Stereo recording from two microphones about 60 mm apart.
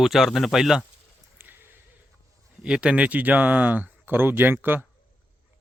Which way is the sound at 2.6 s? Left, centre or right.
Centre.